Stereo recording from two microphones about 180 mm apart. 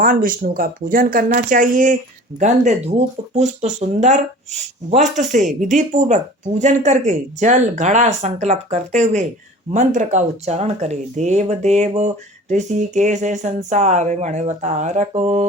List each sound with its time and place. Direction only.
0.0 s speech: 50° right (ahead or behind)